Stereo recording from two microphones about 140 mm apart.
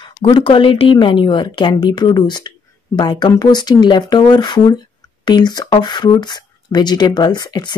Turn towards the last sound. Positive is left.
turn(degrees=30)  # may be behind; listen again after turning